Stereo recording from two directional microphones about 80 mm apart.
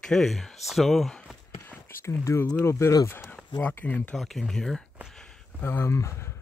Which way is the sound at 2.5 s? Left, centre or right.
Left.